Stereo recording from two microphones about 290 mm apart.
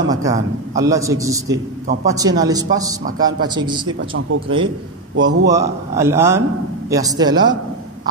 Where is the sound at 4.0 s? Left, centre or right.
Right.